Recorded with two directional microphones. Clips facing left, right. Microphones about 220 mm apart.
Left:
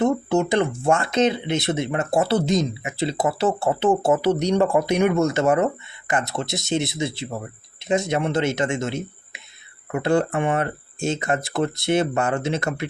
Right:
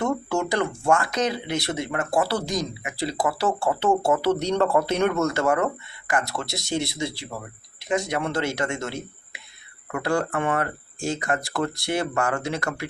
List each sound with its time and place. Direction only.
0.0 s speech: 20° left (ahead or behind)